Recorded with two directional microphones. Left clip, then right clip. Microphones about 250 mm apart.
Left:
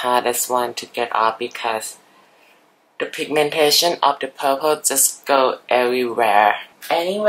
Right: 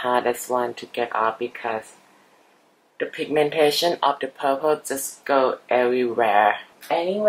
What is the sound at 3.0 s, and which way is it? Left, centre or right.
A woman's voice, centre.